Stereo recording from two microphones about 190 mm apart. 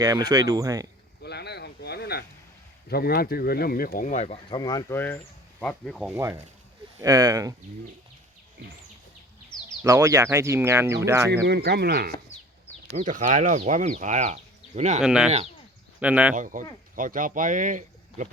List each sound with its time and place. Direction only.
0.0 s speech: 20° right (ahead or behind)
1.2 s a sound: 60° left (ahead or behind)
2.9 s speech: 55° left (ahead or behind); by 6.1 s centre (ahead or behind)
6.1 s speech: 15° right (ahead or behind)
9.8 s speech: 15° right (ahead or behind)
11.4 s speech: 60° right (ahead or behind)
13.0 s speech: 40° right (ahead or behind)
15.0 s speech: 5° right (ahead or behind)
16.3 s speech: 45° right (ahead or behind)